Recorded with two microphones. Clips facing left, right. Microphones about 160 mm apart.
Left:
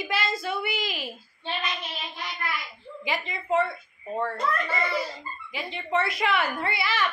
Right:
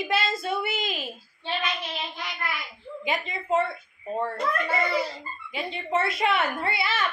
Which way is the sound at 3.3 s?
25° right (ahead or behind).